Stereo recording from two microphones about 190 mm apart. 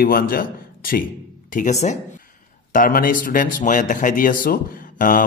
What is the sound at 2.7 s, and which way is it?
Speech, 50° left (ahead or behind).